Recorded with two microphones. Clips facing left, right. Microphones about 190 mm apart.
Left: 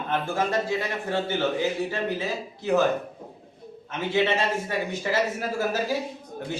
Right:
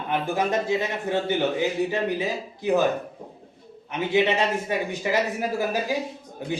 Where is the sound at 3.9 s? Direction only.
15° right (ahead or behind).